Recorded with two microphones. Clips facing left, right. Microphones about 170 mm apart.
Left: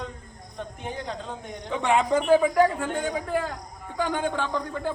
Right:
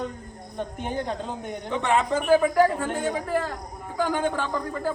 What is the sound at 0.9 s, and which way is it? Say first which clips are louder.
Speech: right 4 dB; 50° right (ahead or behind).